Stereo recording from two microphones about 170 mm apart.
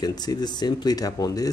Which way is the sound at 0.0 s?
25° left (ahead or behind).